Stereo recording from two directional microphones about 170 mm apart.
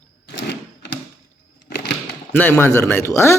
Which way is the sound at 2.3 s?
10° left (ahead or behind).